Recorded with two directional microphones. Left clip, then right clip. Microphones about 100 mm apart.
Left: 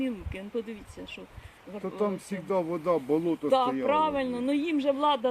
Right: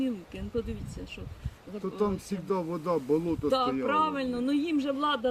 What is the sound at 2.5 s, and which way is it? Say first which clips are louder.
Speech: left 3 dB; 75° right (ahead or behind).